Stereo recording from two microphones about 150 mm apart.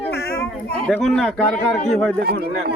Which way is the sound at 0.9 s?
5° left (ahead or behind).